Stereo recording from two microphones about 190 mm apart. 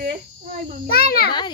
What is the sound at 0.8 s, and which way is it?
Speech, 55° left (ahead or behind).